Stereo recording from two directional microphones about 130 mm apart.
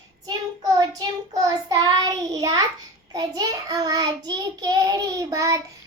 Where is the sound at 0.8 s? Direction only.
30° right (ahead or behind).